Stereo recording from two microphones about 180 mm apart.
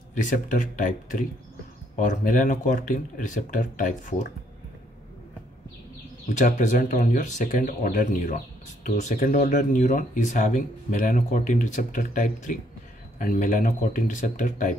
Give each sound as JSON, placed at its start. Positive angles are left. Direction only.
{"t": 0.1, "sound": "speech", "side_deg": 45}
{"t": 2.0, "sound": "speech", "side_deg": 45}
{"t": 6.2, "sound": "speech", "side_deg": 45}